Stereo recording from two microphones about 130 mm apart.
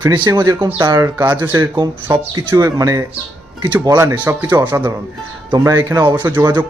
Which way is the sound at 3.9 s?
15° right (ahead or behind).